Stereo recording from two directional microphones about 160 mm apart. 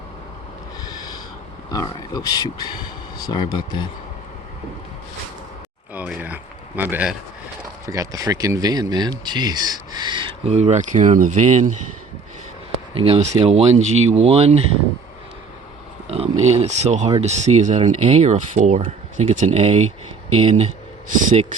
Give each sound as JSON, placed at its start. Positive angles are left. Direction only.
{"t": 1.7, "sound": "speech", "side_deg": 25}
{"t": 5.9, "sound": "speech", "side_deg": -10}
{"t": 7.9, "sound": "speech", "side_deg": -20}
{"t": 12.9, "sound": "speech", "side_deg": -35}
{"t": 16.0, "sound": "speech", "side_deg": -40}
{"t": 21.2, "sound": "speech", "side_deg": -55}